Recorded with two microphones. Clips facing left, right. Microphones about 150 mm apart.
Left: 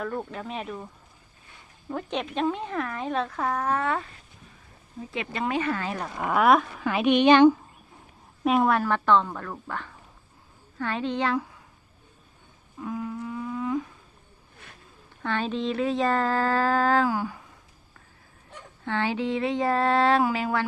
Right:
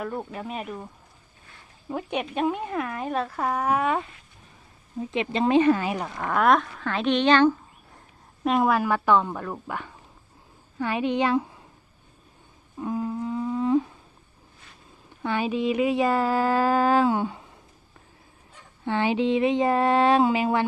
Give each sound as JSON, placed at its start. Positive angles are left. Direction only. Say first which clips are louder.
{"t": 0.0, "sound": "speech", "louder": "even", "side_deg": -5}
{"t": 1.9, "sound": "speech", "louder": "right 1 dB", "side_deg": -10}
{"t": 5.1, "sound": "a sound", "louder": "right 7 dB", "side_deg": -20}
{"t": 6.1, "sound": "speech", "louder": "left 1 dB", "side_deg": 5}
{"t": 8.4, "sound": "speech", "louder": "even", "side_deg": 0}
{"t": 8.8, "sound": "speech", "louder": "right 1 dB", "side_deg": -10}
{"t": 12.8, "sound": "humming", "louder": "right 4 dB", "side_deg": -30}
{"t": 15.2, "sound": "speech", "louder": "right 3 dB", "side_deg": -10}
{"t": 18.9, "sound": "a sound", "louder": "right 4 dB", "side_deg": -15}